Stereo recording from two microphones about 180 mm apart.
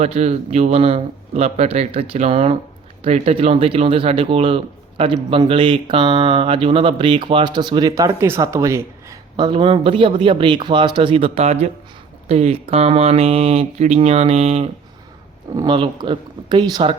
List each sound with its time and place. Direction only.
0.0 s speech: 35° right (ahead or behind); by 9.1 s 15° right (ahead or behind)
9.3 s speech: 30° right (ahead or behind)